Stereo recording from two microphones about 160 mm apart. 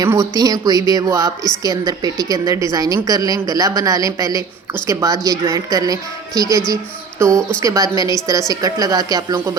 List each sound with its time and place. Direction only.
0.0 s a woman's voice: 20° right (ahead or behind)